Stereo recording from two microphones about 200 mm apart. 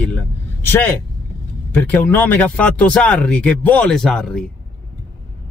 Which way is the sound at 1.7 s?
10° left (ahead or behind).